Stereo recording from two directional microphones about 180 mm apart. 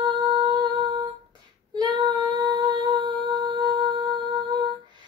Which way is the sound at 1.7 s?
25° right (ahead or behind).